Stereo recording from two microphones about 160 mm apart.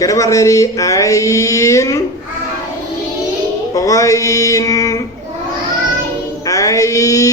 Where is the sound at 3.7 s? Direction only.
20° left (ahead or behind).